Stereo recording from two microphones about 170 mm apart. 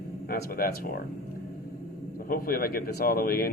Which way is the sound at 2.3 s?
60° left (ahead or behind).